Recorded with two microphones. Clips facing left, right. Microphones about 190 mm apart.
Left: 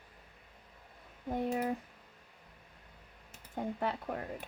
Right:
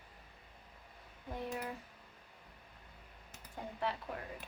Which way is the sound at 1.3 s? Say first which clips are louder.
Left 8 dB; 55° left (ahead or behind).